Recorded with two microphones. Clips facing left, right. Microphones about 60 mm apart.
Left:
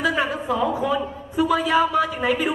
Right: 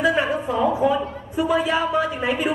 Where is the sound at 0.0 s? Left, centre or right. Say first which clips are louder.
Right 2 dB; right.